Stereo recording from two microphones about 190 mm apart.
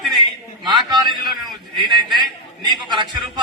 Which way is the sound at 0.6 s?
20° right (ahead or behind).